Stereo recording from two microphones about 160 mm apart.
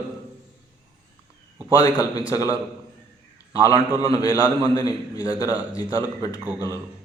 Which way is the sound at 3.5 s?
20° left (ahead or behind).